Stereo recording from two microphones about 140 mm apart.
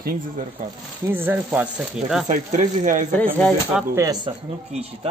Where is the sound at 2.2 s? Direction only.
65° right (ahead or behind).